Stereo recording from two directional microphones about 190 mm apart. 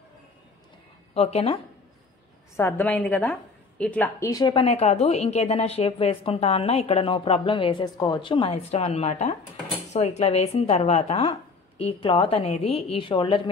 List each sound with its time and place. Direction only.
1.1 s a woman's voice: 30° left (ahead or behind)
2.5 s a woman's voice: 10° left (ahead or behind); by 13.4 s 30° left (ahead or behind)